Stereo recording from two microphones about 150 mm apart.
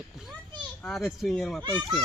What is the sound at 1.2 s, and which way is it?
Speech, centre (ahead or behind).